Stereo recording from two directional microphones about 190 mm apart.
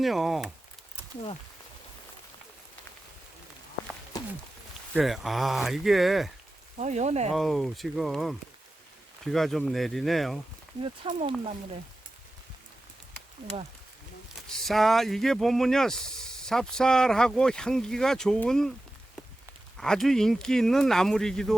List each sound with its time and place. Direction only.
0.0 s speech: centre (ahead or behind)
4.9 s speech: centre (ahead or behind)
6.7 s speech: 35° right (ahead or behind)
7.3 s speech: centre (ahead or behind)
11.1 s speech: 25° right (ahead or behind)
14.7 s speech: centre (ahead or behind)
19.7 s speech: 5° left (ahead or behind)